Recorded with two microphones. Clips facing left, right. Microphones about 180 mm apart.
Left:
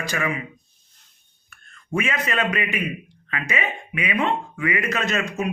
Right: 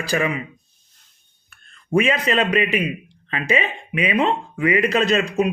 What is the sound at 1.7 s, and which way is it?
A man's voice, 30° right (ahead or behind).